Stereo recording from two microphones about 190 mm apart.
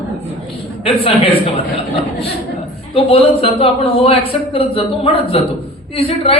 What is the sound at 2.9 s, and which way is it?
A man's voice, 30° left (ahead or behind).